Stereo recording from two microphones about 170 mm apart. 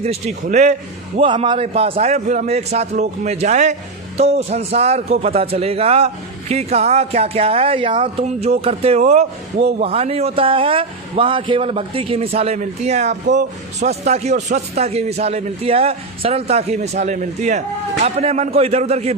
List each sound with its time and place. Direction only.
0.0 s a man's voice: 40° right (ahead or behind)
1.3 s a man's voice: 30° right (ahead or behind)